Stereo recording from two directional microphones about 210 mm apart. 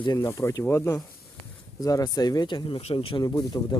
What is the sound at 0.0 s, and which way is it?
Speech, 15° left (ahead or behind).